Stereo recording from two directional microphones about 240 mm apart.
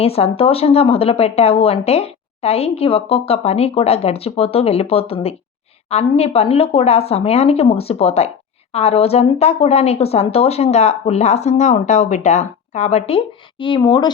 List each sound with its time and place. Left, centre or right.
0.0 s speech: left